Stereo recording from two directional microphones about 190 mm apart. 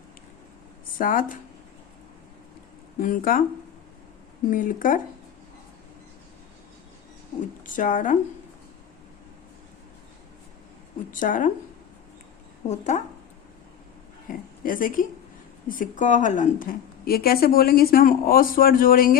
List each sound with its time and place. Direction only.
0.9 s a woman's voice: 45° left (ahead or behind)
3.0 s a woman's voice: 45° left (ahead or behind)
4.5 s a woman's voice: 45° left (ahead or behind)
7.6 s a woman's voice: 45° left (ahead or behind)
11.1 s a woman's voice: 45° left (ahead or behind)
12.6 s a woman's voice: 40° left (ahead or behind)
14.3 s a woman's voice: 45° left (ahead or behind)